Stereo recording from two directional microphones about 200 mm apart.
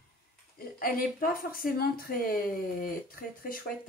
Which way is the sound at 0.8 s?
45° left (ahead or behind).